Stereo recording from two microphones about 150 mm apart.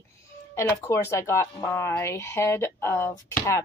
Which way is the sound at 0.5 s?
20° left (ahead or behind).